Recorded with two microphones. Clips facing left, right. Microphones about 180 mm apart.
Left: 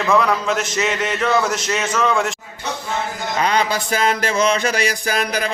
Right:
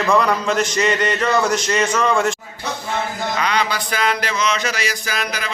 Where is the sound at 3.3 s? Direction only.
40° left (ahead or behind).